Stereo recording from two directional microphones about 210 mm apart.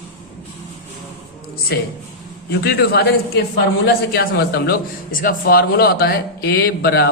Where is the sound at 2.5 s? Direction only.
50° left (ahead or behind).